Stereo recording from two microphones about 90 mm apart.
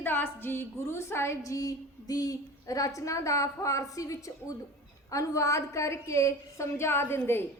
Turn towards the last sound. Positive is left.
turn(degrees=25)  # may be behind; listen again after turning